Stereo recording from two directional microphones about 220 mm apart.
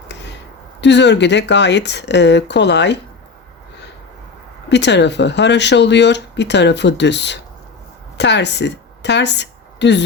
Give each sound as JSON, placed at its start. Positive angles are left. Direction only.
{"t": 0.8, "sound": "speech", "side_deg": 50}
{"t": 4.7, "sound": "a woman's voice", "side_deg": 55}